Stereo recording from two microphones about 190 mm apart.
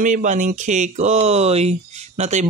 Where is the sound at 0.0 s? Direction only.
40° right (ahead or behind).